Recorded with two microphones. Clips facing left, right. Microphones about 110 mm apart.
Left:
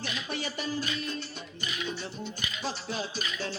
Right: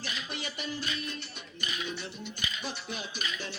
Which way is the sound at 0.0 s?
45° left (ahead or behind).